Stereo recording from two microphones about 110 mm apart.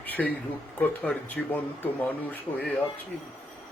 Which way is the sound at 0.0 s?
15° left (ahead or behind).